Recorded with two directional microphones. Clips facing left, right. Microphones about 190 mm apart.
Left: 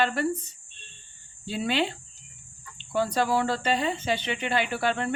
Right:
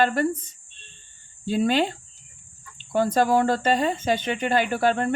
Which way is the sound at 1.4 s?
45° right (ahead or behind).